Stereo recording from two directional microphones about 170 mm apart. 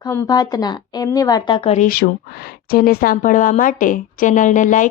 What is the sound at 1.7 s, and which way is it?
Speech, 60° left (ahead or behind).